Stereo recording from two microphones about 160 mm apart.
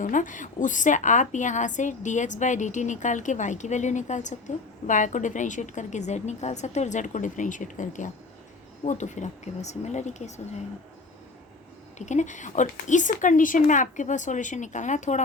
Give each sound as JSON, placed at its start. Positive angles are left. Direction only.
{"t": 0.0, "sound": "a woman's voice", "side_deg": 55}
{"t": 11.9, "sound": "a woman's voice", "side_deg": 45}